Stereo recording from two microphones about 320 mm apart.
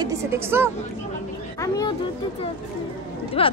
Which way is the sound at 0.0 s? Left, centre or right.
Centre.